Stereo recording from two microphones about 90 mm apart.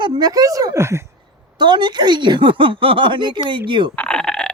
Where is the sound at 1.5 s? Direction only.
55° right (ahead or behind).